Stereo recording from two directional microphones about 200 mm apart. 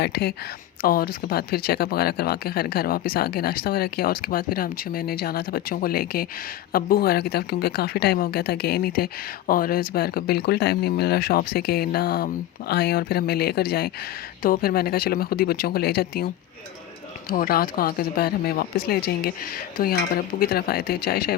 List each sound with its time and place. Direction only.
0.0 s speech: 55° left (ahead or behind)